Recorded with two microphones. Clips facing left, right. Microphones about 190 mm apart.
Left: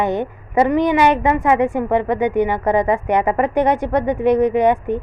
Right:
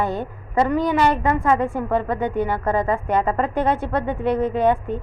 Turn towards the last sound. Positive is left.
turn(degrees=15)  # may be behind; listen again after turning